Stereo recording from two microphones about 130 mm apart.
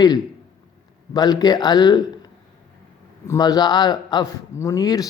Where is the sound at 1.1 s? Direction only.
30° left (ahead or behind).